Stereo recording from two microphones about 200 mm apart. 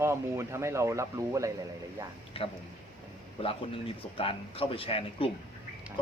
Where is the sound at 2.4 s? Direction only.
25° left (ahead or behind).